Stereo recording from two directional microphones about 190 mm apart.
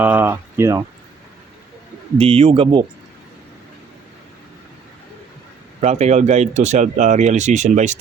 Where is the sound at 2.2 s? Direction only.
30° right (ahead or behind).